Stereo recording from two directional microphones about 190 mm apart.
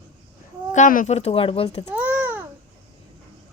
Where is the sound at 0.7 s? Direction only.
40° left (ahead or behind).